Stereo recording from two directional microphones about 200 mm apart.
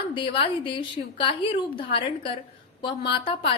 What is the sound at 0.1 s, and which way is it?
A woman's voice, 25° left (ahead or behind).